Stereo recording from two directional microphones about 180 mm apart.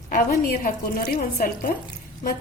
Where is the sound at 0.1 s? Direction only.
50° left (ahead or behind).